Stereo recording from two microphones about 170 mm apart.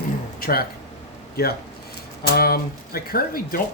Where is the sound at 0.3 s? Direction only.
60° left (ahead or behind).